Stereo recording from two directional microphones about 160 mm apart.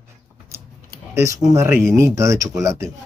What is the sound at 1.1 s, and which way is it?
Speech, 20° right (ahead or behind).